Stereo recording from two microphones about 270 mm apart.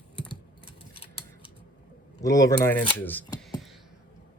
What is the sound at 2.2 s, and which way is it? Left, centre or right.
Speech, centre.